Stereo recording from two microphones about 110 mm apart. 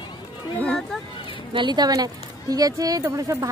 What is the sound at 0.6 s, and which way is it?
Speech, 5° left (ahead or behind).